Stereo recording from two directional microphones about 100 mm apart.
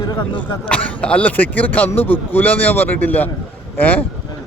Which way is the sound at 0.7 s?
10° left (ahead or behind).